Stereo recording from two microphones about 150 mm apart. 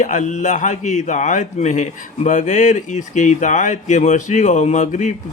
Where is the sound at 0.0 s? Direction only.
55° left (ahead or behind).